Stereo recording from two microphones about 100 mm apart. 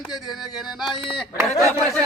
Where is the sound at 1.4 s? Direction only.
35° right (ahead or behind).